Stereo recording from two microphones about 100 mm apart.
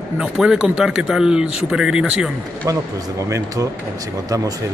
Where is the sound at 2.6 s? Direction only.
35° right (ahead or behind).